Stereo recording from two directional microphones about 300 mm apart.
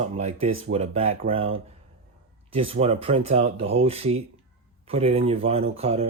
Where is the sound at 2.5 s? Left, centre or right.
Centre.